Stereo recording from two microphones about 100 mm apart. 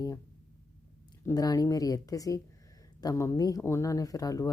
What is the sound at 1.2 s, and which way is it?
Speech, 40° left (ahead or behind).